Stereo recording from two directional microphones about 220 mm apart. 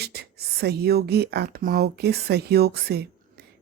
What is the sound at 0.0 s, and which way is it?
Speech, 45° right (ahead or behind).